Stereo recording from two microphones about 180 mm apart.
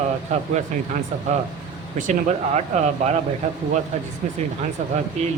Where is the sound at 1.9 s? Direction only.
40° right (ahead or behind).